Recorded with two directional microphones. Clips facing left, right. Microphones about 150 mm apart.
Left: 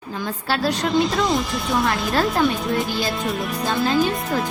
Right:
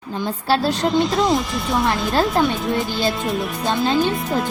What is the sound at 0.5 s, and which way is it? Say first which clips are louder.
Speech: right 3 dB; 30° right (ahead or behind).